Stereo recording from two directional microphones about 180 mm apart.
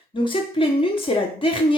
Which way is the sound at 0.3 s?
30° left (ahead or behind).